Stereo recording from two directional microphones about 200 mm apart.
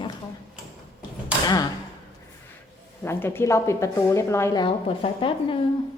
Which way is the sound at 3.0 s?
10° left (ahead or behind).